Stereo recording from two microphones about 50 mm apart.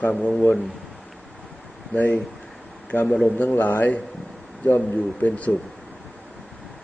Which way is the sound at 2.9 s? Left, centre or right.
Left.